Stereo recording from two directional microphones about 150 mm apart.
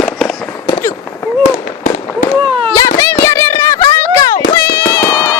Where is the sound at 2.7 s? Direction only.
20° left (ahead or behind).